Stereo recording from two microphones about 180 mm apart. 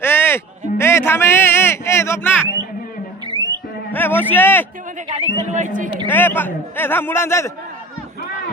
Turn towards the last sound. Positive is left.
turn(degrees=15)  # may be behind; listen again after turning